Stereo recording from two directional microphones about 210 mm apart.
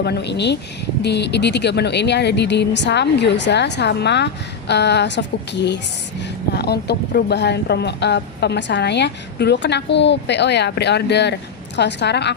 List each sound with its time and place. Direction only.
0.0 s a woman's voice: 50° left (ahead or behind)